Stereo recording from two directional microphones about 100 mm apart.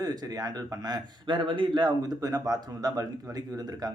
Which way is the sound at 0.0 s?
40° right (ahead or behind).